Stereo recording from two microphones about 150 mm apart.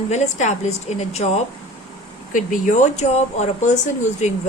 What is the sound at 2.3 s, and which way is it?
Speech, 60° left (ahead or behind).